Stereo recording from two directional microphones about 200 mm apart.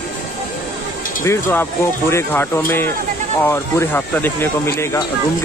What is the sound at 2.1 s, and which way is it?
Speech, 10° left (ahead or behind).